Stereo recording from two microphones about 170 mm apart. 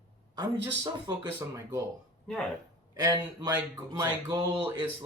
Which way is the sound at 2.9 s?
20° right (ahead or behind).